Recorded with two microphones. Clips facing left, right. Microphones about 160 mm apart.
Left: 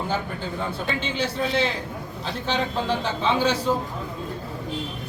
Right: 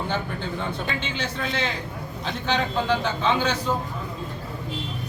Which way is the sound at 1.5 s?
35° left (ahead or behind).